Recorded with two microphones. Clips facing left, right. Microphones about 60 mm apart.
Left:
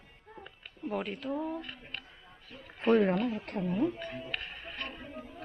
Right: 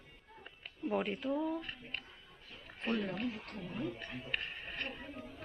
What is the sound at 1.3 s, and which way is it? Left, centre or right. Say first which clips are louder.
Speech: left 1 dB; left.